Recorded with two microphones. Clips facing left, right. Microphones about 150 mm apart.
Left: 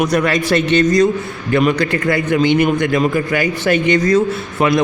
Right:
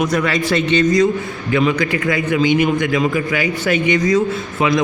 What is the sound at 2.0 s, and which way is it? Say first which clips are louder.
A man's voice: left 2 dB; 40° left (ahead or behind).